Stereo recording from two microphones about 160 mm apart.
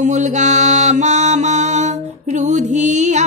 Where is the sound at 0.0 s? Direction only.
50° right (ahead or behind).